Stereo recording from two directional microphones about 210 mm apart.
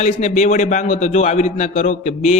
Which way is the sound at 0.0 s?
35° left (ahead or behind).